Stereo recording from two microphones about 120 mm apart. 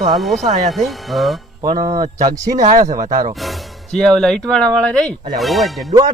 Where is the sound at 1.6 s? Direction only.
35° right (ahead or behind).